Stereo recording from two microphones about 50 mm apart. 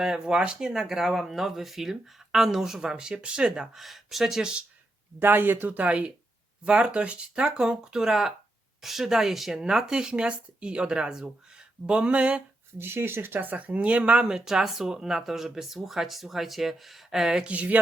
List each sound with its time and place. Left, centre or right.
0.0 s speech: centre
3.8 s speech: centre
5.2 s speech: right
12.8 s speech: right; by 17.4 s centre
17.4 s speech: right